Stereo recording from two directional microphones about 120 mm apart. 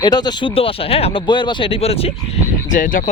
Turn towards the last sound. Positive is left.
turn(degrees=90)